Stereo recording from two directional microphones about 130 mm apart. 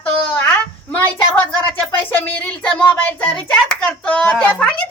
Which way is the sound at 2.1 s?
15° left (ahead or behind).